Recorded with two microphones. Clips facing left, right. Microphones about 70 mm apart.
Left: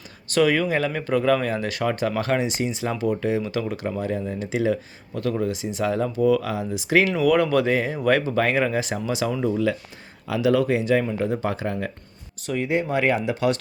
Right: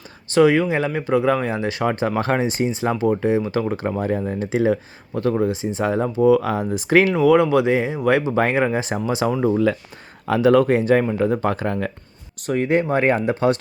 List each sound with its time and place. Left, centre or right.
0.3 s speech: right
6.5 s speech: right
7.1 s speech: right